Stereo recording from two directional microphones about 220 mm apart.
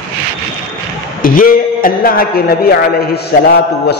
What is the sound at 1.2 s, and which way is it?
A man's voice, 40° left (ahead or behind).